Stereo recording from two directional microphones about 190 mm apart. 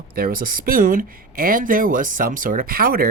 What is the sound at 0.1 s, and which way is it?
Speech, 50° right (ahead or behind).